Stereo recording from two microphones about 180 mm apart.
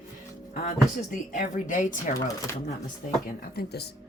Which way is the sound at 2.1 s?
20° left (ahead or behind).